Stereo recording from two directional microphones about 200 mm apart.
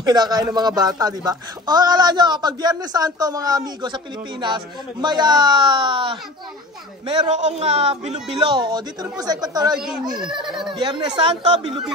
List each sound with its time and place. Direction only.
0.0 s a man's voice: 20° right (ahead or behind)
8.4 s a man's voice: 20° right (ahead or behind)
9.8 s speech: 5° right (ahead or behind)
10.7 s a man's voice: 20° right (ahead or behind)